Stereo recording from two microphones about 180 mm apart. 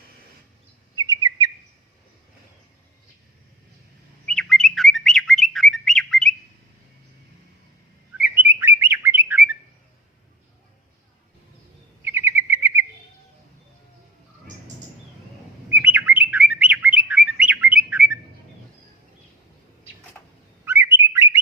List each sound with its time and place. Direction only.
0.9 s bird: 25° right (ahead or behind)
4.3 s bird: 5° left (ahead or behind)
8.2 s chirp: 10° right (ahead or behind)
12.0 s bird: 15° right (ahead or behind)
15.7 s bird: 10° right (ahead or behind)
20.1 s a sound: 5° left (ahead or behind)
20.7 s bird: 15° right (ahead or behind)